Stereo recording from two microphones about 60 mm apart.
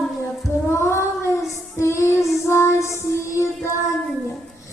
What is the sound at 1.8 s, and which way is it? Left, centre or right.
Music, left.